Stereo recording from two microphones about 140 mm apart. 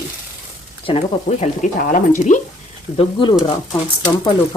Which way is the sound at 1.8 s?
70° left (ahead or behind).